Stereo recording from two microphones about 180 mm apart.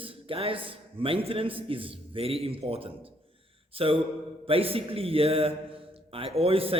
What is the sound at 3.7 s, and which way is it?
Mantra, 30° right (ahead or behind).